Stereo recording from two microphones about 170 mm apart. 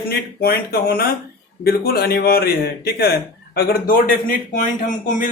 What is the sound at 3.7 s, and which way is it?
A man's voice, 55° left (ahead or behind).